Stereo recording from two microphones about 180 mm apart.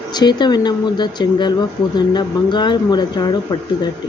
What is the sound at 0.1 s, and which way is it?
Speech, 25° left (ahead or behind).